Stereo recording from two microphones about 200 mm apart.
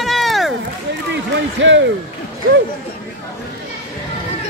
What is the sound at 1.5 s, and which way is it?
Speech, 65° right (ahead or behind).